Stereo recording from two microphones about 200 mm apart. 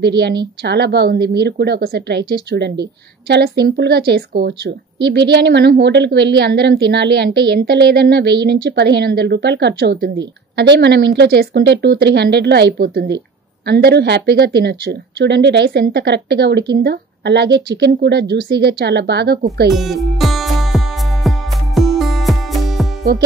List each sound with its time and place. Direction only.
0.7 s speech: 55° right (ahead or behind)
19.7 s music: centre (ahead or behind)